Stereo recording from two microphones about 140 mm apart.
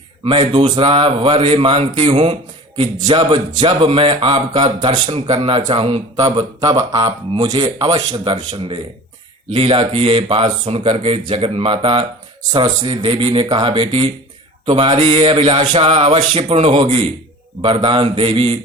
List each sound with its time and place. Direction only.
0.3 s speech: 40° right (ahead or behind)
5.1 s speech: 50° right (ahead or behind)
7.0 s speech: 30° right (ahead or behind)